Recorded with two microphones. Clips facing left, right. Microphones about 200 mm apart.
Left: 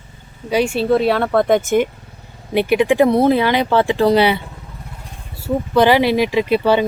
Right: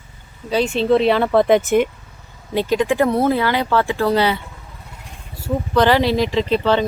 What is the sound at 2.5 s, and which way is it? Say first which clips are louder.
Speech: left 3 dB; 15° left (ahead or behind).